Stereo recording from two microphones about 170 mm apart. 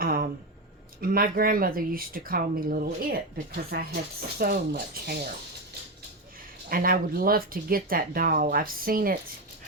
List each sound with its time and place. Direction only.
0.0 s a sound: 60° right (ahead or behind)
1.0 s speech: 60° right (ahead or behind)
3.7 s speech: 75° right (ahead or behind)
4.4 s speech: 60° right (ahead or behind)
6.7 s speech: 60° right (ahead or behind)